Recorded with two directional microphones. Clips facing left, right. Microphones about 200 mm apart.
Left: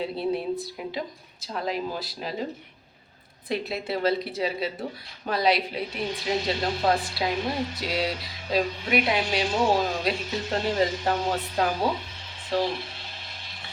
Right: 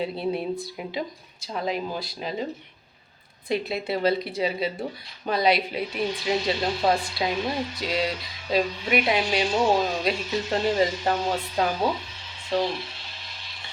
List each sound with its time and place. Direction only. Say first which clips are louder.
0.0 s speech: even; centre (ahead or behind)
3.5 s speech: right 2 dB; centre (ahead or behind)
12.8 s a sound: even; 50° left (ahead or behind)